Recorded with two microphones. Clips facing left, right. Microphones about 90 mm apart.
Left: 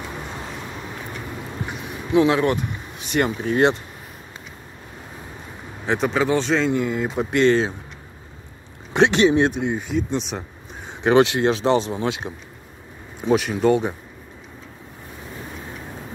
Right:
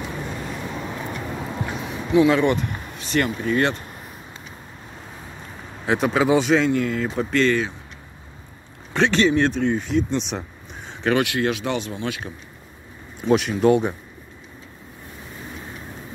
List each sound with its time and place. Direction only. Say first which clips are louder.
2.2 s speech: right 1 dB; 5° left (ahead or behind)
3.5 s speech: left 4 dB; 25° left (ahead or behind)
5.9 s speech: right 1 dB; 5° right (ahead or behind)
6.7 s speech: even; 15° left (ahead or behind)
8.9 s speech: left 2 dB; 20° left (ahead or behind); by 10.4 s 5° left (ahead or behind)
10.9 s speech: left 5 dB; 20° left (ahead or behind)
13.2 s speech: right 1 dB; centre (ahead or behind)